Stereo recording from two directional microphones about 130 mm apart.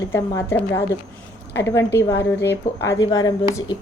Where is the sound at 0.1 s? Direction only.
20° left (ahead or behind).